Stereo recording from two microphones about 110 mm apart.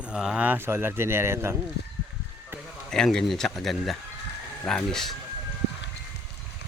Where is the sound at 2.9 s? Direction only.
5° left (ahead or behind).